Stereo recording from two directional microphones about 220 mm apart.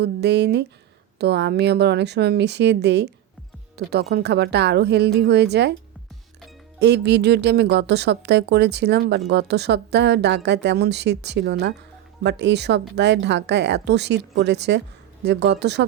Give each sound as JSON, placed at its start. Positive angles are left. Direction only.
{"t": 0.0, "sound": "speech", "side_deg": -50}
{"t": 6.7, "sound": "speech", "side_deg": -50}